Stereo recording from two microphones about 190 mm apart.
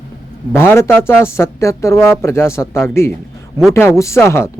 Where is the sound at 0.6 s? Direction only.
10° left (ahead or behind).